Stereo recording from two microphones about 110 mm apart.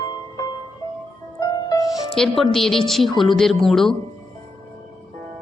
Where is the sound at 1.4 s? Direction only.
35° left (ahead or behind).